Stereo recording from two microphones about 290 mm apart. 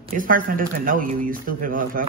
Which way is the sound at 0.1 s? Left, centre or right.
Right.